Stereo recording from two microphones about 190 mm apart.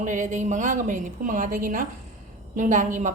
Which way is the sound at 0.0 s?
40° right (ahead or behind).